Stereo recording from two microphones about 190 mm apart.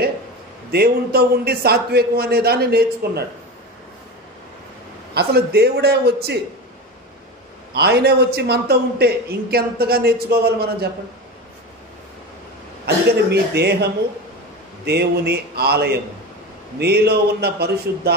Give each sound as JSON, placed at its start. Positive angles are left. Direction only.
{"t": 0.7, "sound": "a man's voice", "side_deg": -55}
{"t": 5.1, "sound": "a man's voice", "side_deg": -55}
{"t": 7.7, "sound": "a man's voice", "side_deg": -60}
{"t": 12.8, "sound": "a man's voice", "side_deg": -60}
{"t": 14.9, "sound": "a man's voice", "side_deg": -60}